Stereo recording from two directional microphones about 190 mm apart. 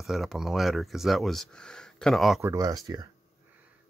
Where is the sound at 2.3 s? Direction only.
15° right (ahead or behind).